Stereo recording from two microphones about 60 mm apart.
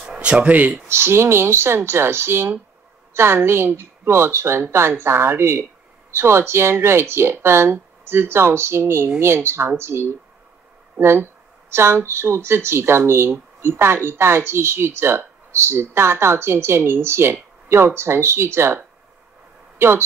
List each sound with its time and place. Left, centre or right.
0.1 s speech: centre
0.8 s speech: right